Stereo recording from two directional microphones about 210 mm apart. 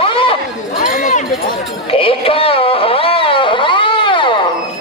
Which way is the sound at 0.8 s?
40° left (ahead or behind).